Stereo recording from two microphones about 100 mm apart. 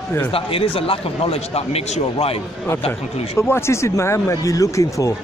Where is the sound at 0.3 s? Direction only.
70° left (ahead or behind); by 2.4 s 85° left.